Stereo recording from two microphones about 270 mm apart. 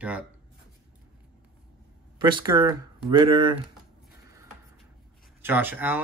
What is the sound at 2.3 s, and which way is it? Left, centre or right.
Speech, centre.